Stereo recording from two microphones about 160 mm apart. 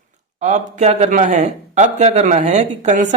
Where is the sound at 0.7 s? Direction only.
45° right (ahead or behind).